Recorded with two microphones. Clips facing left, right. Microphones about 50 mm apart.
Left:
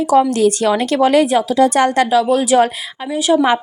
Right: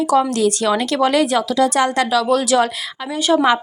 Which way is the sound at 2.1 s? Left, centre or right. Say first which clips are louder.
Left 3 dB; centre.